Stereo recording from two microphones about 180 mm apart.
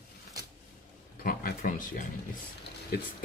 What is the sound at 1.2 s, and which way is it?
Speech, 50° left (ahead or behind).